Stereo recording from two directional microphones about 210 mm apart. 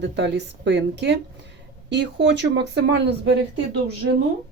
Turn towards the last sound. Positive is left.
turn(degrees=-55)  # may be behind; listen again after turning